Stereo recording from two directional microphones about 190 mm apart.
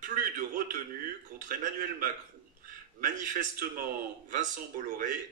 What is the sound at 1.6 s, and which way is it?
Speech, 45° right (ahead or behind).